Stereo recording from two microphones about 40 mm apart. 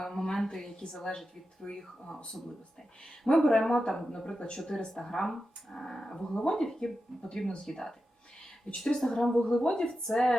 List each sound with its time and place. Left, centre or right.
0.0 s a sound: centre
0.4 s speech: centre
3.2 s a woman's voice: centre
10.1 s speech: centre